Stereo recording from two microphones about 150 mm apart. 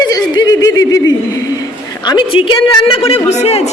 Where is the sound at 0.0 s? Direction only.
25° left (ahead or behind).